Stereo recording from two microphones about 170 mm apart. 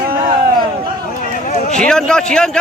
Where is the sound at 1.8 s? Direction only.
5° left (ahead or behind).